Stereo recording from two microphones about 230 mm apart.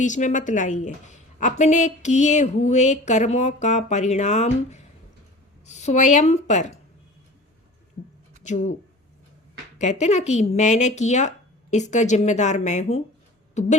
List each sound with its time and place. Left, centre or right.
0.0 s a woman's voice: left
8.4 s a woman's voice: left
9.7 s a woman's voice: left